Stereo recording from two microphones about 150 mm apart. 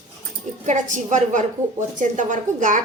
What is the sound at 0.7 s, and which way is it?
A woman's voice, 55° right (ahead or behind).